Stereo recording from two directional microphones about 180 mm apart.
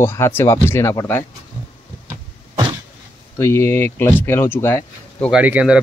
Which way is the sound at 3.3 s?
15° left (ahead or behind).